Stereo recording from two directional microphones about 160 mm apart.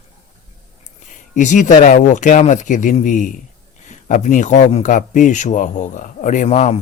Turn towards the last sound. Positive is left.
turn(degrees=45)  # may be behind; listen again after turning